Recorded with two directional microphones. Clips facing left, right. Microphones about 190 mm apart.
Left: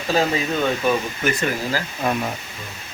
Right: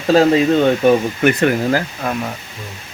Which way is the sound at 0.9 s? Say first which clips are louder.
Right 8 dB; 60° right (ahead or behind).